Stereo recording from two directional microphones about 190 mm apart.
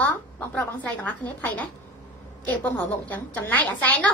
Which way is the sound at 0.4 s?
10° left (ahead or behind).